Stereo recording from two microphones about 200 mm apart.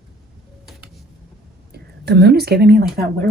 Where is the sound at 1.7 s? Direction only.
55° right (ahead or behind).